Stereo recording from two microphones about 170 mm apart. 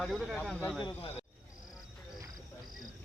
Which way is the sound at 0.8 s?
35° left (ahead or behind).